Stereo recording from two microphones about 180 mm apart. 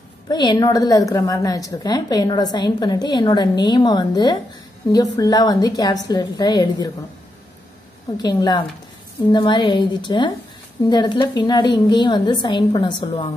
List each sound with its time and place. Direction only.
0.3 s a woman's voice: 25° left (ahead or behind)
8.2 s a woman's voice: 20° left (ahead or behind)
13.0 s a woman's voice: 35° left (ahead or behind)